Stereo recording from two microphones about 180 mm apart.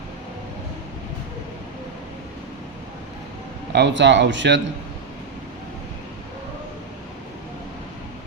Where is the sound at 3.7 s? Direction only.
75° right (ahead or behind).